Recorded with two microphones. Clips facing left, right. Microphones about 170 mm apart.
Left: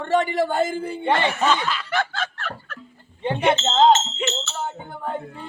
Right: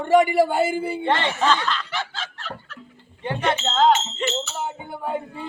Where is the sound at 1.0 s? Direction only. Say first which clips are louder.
Left 2 dB; 10° left (ahead or behind).